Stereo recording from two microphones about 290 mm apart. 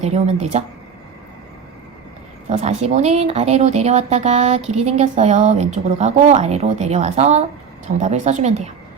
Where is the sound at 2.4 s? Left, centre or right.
Right.